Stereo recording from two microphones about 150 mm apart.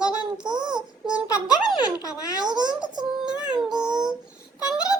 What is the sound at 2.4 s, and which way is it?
Speech, 30° right (ahead or behind).